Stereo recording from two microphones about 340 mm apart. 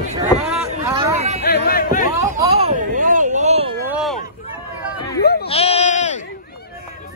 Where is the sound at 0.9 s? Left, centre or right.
Centre.